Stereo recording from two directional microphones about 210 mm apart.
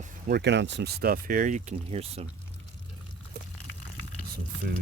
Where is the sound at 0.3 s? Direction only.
55° right (ahead or behind); by 2.2 s 30° right (ahead or behind).